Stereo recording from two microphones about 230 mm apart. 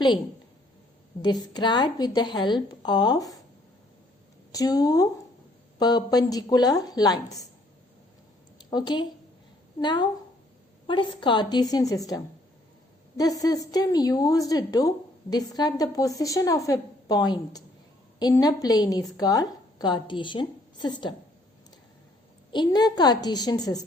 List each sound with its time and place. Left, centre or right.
1.2 s a woman's voice: centre
4.5 s a woman's voice: centre
8.7 s a woman's voice: centre
22.5 s a woman's voice: centre